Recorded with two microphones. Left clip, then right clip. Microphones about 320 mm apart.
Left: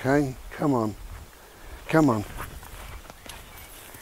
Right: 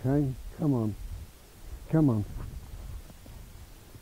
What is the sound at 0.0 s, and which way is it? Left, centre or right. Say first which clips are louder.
Speech: left 7 dB; centre.